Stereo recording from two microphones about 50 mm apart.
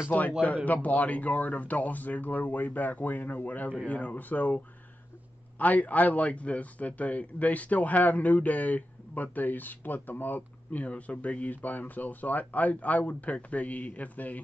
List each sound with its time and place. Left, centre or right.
0.1 s a man's voice: left
5.6 s a man's voice: left